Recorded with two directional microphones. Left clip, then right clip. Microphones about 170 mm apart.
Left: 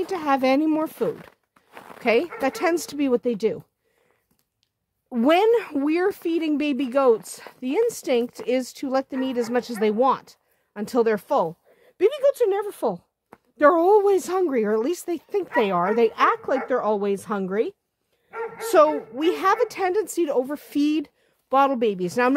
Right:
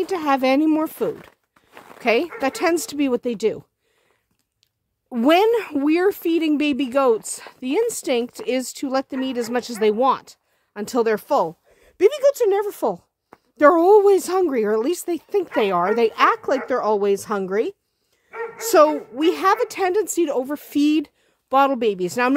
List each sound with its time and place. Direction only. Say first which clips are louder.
0.0 s speech: right 2 dB; 30° right (ahead or behind)
1.0 s zipper: right 1 dB; centre (ahead or behind)
1.7 s a sound: left 1 dB; 10° left (ahead or behind)
2.0 s a sound: right 1 dB; 30° right (ahead or behind)
2.4 s speech: right 2 dB; 30° right (ahead or behind)
5.1 s speech: right 2 dB; 30° right (ahead or behind)